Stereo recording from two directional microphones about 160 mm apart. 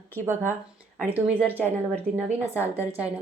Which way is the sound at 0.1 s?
15° right (ahead or behind).